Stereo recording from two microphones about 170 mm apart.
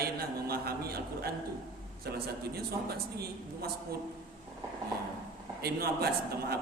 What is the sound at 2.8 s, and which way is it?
Speech, 65° right (ahead or behind).